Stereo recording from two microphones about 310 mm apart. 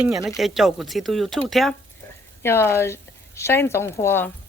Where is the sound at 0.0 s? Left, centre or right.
Centre.